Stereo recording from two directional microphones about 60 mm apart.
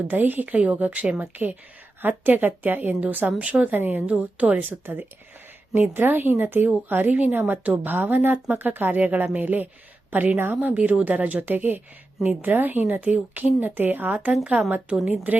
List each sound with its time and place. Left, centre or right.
0.1 s a woman's voice: right